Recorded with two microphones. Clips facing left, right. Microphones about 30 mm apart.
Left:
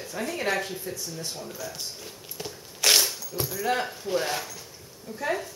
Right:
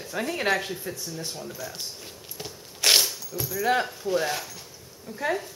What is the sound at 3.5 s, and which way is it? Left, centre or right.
Speech, centre.